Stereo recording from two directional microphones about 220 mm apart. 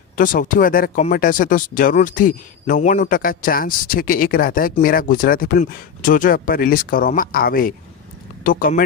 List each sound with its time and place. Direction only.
0.2 s speech: 40° left (ahead or behind)